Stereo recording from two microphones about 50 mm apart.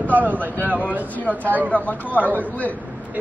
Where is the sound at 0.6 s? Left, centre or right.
Right.